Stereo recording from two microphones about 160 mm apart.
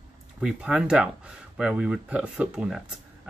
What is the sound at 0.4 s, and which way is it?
Speech, 5° right (ahead or behind).